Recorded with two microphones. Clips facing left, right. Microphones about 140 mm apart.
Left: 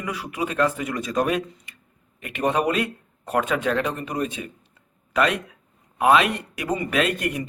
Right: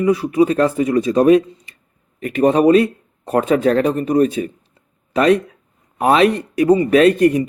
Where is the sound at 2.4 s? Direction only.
35° right (ahead or behind).